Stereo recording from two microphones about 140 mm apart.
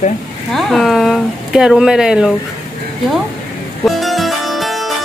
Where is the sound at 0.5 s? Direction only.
Centre (ahead or behind).